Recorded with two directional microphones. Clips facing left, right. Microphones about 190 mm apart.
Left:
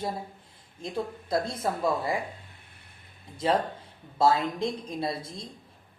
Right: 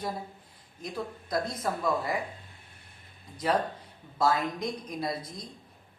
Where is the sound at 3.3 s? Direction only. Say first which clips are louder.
Left 2 dB; 25° left (ahead or behind).